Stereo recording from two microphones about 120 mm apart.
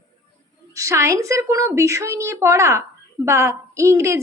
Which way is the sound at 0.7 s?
25° right (ahead or behind).